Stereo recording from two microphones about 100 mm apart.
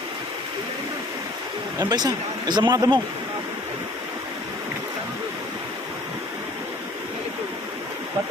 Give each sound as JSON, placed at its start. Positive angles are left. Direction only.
{"t": 1.8, "sound": "speech", "side_deg": -40}